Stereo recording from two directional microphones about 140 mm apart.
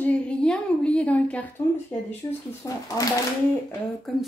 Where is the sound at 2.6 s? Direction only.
25° left (ahead or behind).